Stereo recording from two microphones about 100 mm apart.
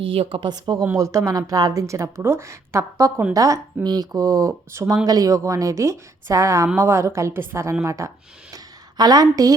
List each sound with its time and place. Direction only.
0.0 s speech: 65° right (ahead or behind)
0.9 s a woman's voice: 30° right (ahead or behind)